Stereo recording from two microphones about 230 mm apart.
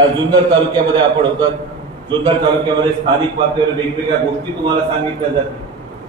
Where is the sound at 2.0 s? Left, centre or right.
Centre.